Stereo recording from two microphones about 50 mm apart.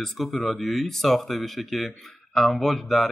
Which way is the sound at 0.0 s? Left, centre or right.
Centre.